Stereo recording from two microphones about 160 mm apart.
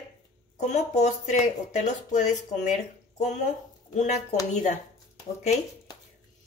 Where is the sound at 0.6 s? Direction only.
45° left (ahead or behind).